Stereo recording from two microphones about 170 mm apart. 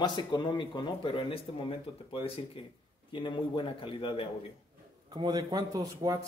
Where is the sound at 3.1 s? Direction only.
30° left (ahead or behind).